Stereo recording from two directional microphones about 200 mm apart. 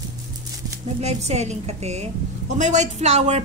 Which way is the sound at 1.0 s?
35° right (ahead or behind).